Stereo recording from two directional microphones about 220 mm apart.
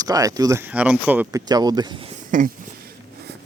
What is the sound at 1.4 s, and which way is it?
Speech, 15° right (ahead or behind).